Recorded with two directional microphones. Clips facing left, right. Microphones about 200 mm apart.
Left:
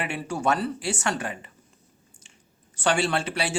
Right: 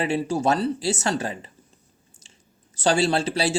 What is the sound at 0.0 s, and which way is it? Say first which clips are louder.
Speech: right 5 dB; 35° right (ahead or behind).